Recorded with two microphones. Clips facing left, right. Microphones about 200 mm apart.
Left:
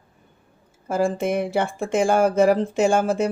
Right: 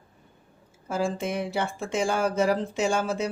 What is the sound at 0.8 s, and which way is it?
Speech, 55° left (ahead or behind).